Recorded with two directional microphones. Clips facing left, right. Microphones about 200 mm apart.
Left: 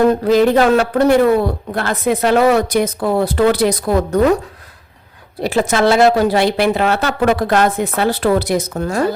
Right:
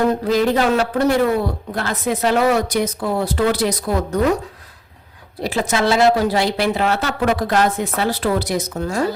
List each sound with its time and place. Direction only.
0.1 s a woman's voice: 60° left (ahead or behind)
5.4 s a woman's voice: 55° left (ahead or behind)